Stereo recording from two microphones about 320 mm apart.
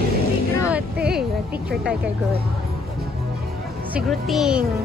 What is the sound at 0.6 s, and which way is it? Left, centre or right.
Speech, centre.